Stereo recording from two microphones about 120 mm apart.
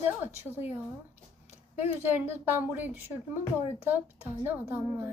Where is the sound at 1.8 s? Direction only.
20° right (ahead or behind).